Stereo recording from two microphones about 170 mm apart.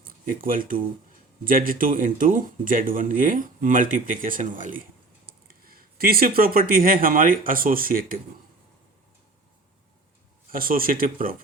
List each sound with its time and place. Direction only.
0.0 s speech: 55° right (ahead or behind)
10.5 s speech: 55° right (ahead or behind)